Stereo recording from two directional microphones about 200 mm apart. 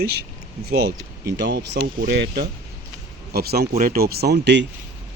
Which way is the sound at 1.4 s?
55° right (ahead or behind).